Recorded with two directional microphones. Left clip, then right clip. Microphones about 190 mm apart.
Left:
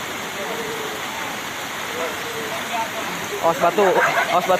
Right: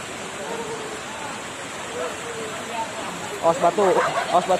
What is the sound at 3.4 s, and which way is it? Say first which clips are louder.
Speech: left 1 dB; 5° left (ahead or behind).